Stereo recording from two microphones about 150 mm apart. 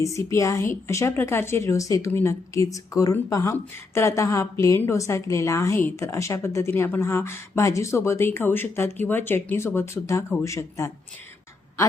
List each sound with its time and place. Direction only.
0.0 s a woman's voice: 20° left (ahead or behind)